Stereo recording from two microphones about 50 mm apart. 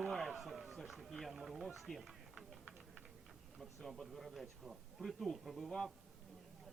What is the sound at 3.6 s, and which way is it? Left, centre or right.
Speech, centre.